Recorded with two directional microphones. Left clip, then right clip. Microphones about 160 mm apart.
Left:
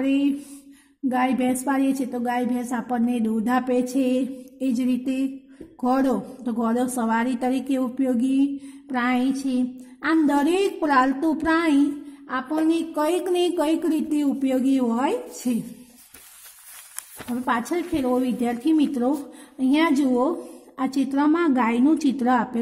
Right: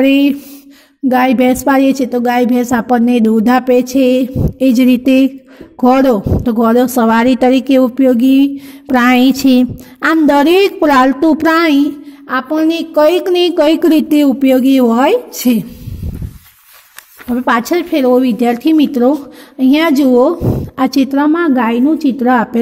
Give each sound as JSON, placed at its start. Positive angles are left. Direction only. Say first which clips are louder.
{"t": 0.0, "sound": "a woman's voice", "louder": "right 13 dB", "side_deg": -40}
{"t": 17.3, "sound": "a woman's voice", "louder": "right 12 dB", "side_deg": -35}